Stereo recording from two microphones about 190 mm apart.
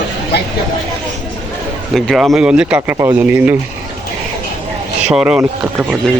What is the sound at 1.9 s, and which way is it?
Speech, centre (ahead or behind).